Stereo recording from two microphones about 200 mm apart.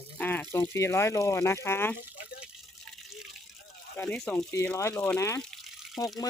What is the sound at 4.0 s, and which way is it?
Speech, 5° left (ahead or behind).